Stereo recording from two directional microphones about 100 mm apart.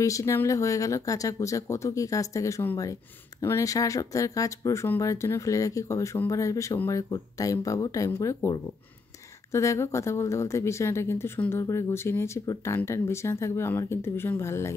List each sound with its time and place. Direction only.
0.0 s speech: 30° left (ahead or behind)